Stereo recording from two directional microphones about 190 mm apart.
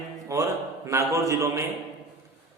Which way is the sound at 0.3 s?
15° right (ahead or behind).